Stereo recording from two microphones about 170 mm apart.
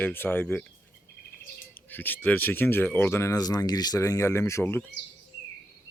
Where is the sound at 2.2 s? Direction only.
10° left (ahead or behind).